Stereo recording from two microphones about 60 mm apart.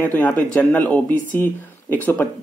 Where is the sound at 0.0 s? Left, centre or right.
Left.